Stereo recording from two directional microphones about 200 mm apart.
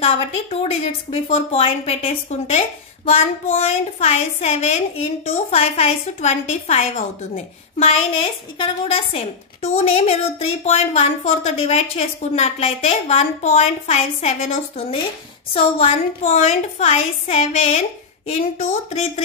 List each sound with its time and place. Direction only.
0.0 s a woman's voice: 30° left (ahead or behind)